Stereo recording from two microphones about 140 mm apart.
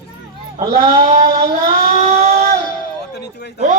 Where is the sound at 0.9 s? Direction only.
55° right (ahead or behind).